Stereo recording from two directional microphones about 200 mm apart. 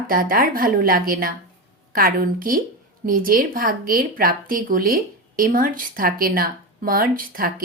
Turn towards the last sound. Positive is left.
turn(degrees=-45)  # may be behind; listen again after turning